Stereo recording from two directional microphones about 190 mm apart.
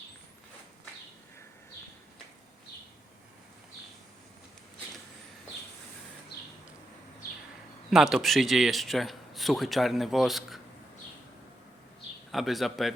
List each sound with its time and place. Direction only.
6.3 s a sound: 60° left (ahead or behind)
7.9 s a man's voice: centre (ahead or behind)
12.3 s a man's voice: centre (ahead or behind)